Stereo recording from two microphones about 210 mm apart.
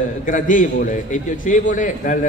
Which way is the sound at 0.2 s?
40° left (ahead or behind).